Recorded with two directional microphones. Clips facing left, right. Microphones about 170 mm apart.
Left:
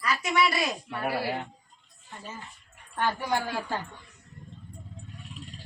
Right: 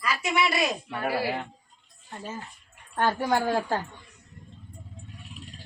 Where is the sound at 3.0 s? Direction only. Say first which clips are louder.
Right 4 dB; 45° right (ahead or behind).